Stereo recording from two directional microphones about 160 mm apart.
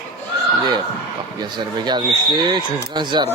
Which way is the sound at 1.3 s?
30° right (ahead or behind).